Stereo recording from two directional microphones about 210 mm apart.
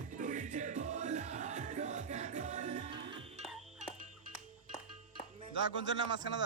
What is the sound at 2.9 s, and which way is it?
Music, 25° right (ahead or behind).